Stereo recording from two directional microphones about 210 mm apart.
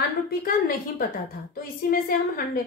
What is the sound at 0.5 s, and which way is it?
A woman's voice, 45° left (ahead or behind).